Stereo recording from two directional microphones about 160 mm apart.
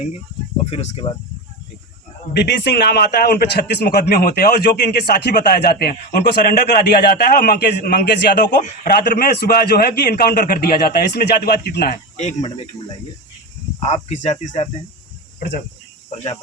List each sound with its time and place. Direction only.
0.6 s speech: 40° left (ahead or behind)
2.6 s a man's voice: 90° left
5.8 s a man's voice: 75° left (ahead or behind); by 8.5 s 90° left
8.6 s a man's voice: 65° left (ahead or behind); by 11.9 s 85° left
12.1 s speech: 45° left (ahead or behind)
13.7 s speech: 45° left (ahead or behind)